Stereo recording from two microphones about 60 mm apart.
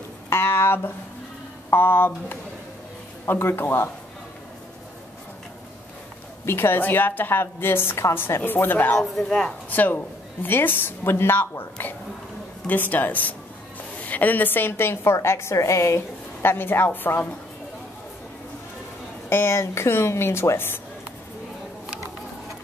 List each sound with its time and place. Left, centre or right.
0.3 s a woman's voice: left
6.4 s a woman's voice: left
8.9 s speech: centre
9.7 s a woman's voice: left
16.4 s a woman's voice: left
19.2 s speech: left